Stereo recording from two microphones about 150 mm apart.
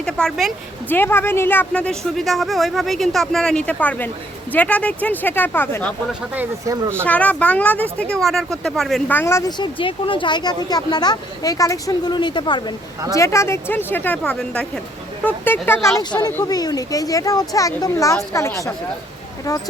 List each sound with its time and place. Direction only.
0.0 s a woman's voice: 5° left (ahead or behind)
0.9 s speech: 15° left (ahead or behind)
6.7 s speech: 20° right (ahead or behind)
7.0 s speech: 10° left (ahead or behind)
9.5 s speech: 30° left (ahead or behind)
13.1 s speech: 20° left (ahead or behind)